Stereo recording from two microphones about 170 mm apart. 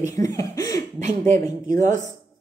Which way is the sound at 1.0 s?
45° right (ahead or behind).